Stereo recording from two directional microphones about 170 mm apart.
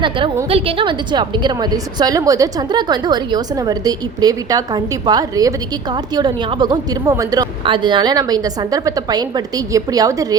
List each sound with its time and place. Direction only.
0.5 s a woman's voice: 30° right (ahead or behind)